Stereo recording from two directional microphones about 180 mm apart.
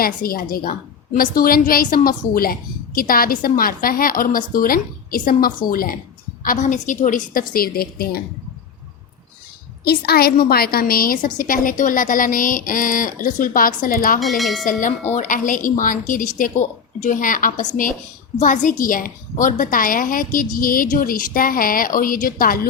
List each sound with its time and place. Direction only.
0.0 s a woman's voice: 55° left (ahead or behind)
9.8 s a woman's voice: 60° left (ahead or behind)
14.2 s speech: centre (ahead or behind)
14.6 s a woman's voice: 45° left (ahead or behind)